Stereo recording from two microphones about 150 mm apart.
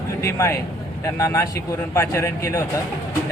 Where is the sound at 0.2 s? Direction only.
20° left (ahead or behind).